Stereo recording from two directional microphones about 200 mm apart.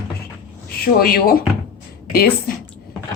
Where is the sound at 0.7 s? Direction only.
50° left (ahead or behind).